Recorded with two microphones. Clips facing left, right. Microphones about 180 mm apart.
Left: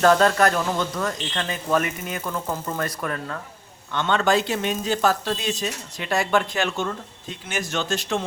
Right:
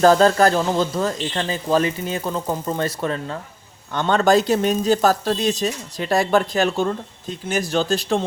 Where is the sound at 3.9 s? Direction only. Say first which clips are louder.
Right 4 dB; 40° right (ahead or behind).